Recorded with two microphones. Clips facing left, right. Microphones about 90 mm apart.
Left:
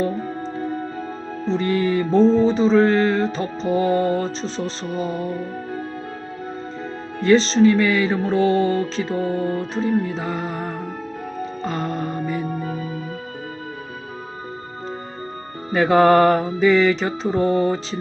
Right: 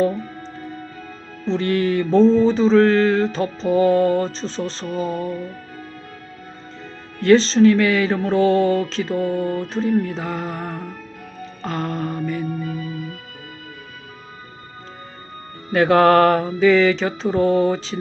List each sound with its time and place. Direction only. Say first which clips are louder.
0.1 s music: left 3 dB; 35° left (ahead or behind)
1.7 s mantra: right 2 dB; centre (ahead or behind)
7.2 s mantra: right 2 dB; centre (ahead or behind)
12.5 s music: even; 30° left (ahead or behind)
15.7 s mantra: right 1 dB; centre (ahead or behind)